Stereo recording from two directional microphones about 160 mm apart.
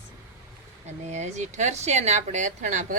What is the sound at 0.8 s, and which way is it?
Speech, 45° right (ahead or behind).